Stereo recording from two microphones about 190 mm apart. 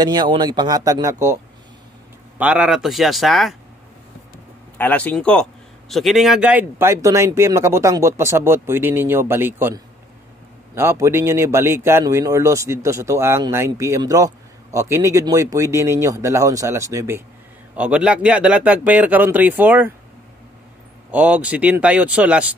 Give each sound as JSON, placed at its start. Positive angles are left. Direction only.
{"t": 0.0, "sound": "speech", "side_deg": -20}
{"t": 4.7, "sound": "a man's voice", "side_deg": 10}
{"t": 21.1, "sound": "a man's voice", "side_deg": -5}